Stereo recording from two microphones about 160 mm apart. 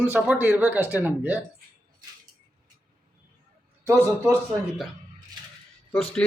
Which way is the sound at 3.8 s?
15° right (ahead or behind).